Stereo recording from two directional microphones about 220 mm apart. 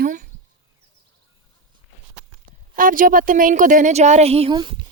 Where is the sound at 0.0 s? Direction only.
35° right (ahead or behind).